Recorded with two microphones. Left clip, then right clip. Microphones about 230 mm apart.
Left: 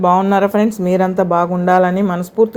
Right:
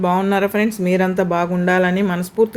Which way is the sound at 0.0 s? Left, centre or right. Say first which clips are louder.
Left 5 dB; centre.